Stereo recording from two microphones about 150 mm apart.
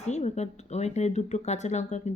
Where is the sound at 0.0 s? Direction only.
50° left (ahead or behind).